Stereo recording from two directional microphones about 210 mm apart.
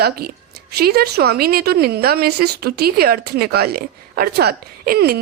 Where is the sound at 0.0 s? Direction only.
45° right (ahead or behind).